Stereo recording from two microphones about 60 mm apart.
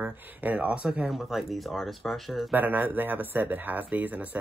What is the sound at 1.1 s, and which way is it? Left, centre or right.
Speech, centre.